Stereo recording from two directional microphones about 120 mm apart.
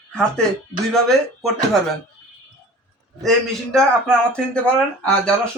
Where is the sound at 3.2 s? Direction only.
Centre (ahead or behind).